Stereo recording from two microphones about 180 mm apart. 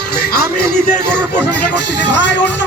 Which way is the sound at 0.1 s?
55° left (ahead or behind).